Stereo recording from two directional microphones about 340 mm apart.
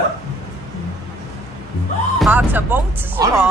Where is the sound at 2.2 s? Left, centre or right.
Centre.